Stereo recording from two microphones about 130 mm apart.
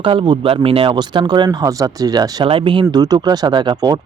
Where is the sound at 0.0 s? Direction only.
40° right (ahead or behind).